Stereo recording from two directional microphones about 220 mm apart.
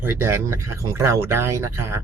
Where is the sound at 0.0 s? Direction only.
10° right (ahead or behind).